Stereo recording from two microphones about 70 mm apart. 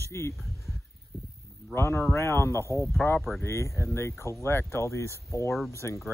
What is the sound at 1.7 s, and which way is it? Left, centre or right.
Speech, left.